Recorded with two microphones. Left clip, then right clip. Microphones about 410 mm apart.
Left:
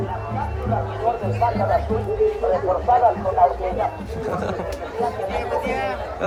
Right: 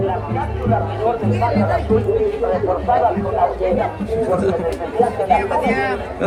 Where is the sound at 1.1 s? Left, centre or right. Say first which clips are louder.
Right 1 dB; centre.